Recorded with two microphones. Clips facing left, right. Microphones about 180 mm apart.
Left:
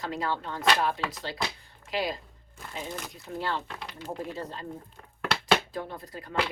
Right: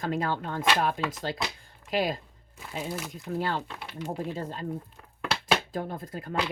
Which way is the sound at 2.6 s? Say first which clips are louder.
Right 3 dB; 5° right (ahead or behind).